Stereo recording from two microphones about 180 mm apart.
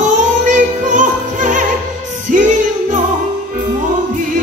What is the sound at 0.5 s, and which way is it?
Music, 45° right (ahead or behind).